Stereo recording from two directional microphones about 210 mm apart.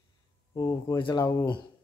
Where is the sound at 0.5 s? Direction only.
15° left (ahead or behind).